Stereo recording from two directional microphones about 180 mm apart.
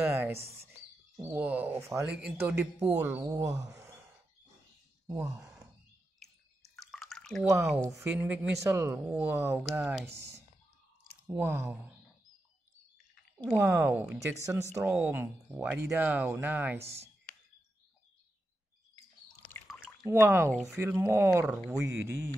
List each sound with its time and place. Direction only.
0.1 s speech: 15° right (ahead or behind)
5.1 s speech: 5° right (ahead or behind)
6.7 s drip: centre (ahead or behind)
7.4 s speech: 15° right (ahead or behind)
11.2 s speech: 10° right (ahead or behind)
13.5 s speech: 15° right (ahead or behind)
20.1 s speech: 15° right (ahead or behind)